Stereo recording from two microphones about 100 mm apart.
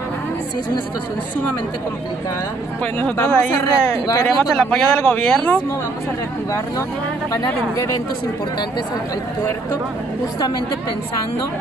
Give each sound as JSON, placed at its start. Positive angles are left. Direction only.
{"t": 2.8, "sound": "speech", "side_deg": 15}
{"t": 4.3, "sound": "speech", "side_deg": 5}
{"t": 7.7, "sound": "speech", "side_deg": 35}